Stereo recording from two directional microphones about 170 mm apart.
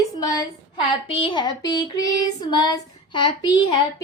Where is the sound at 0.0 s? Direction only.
20° left (ahead or behind).